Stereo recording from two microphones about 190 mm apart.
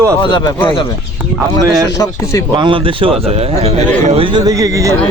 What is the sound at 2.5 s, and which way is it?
A man's voice, 25° right (ahead or behind).